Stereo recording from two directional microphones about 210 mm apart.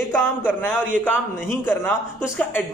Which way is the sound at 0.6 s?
10° left (ahead or behind).